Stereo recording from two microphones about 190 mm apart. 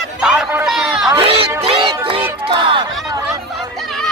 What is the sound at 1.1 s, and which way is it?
Music, 30° right (ahead or behind).